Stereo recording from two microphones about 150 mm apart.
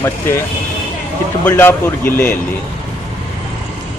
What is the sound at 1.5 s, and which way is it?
Speech, 15° left (ahead or behind).